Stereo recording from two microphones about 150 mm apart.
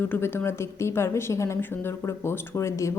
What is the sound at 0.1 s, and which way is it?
A woman's voice, 15° left (ahead or behind).